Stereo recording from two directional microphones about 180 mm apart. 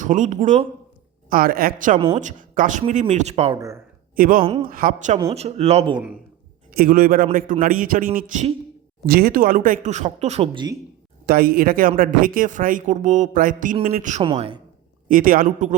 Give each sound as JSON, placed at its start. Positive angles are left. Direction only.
{"t": 0.0, "sound": "speech", "side_deg": -45}
{"t": 1.3, "sound": "speech", "side_deg": -55}
{"t": 4.1, "sound": "speech", "side_deg": -50}
{"t": 6.7, "sound": "speech", "side_deg": -50}
{"t": 9.0, "sound": "speech", "side_deg": -55}
{"t": 11.3, "sound": "speech", "side_deg": -55}
{"t": 14.2, "sound": "a woman's voice", "side_deg": -30}
{"t": 15.1, "sound": "speech", "side_deg": -50}